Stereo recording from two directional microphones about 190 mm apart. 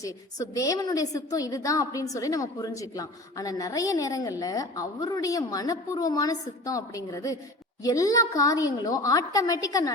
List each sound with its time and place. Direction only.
0.0 s a woman's voice: 15° left (ahead or behind)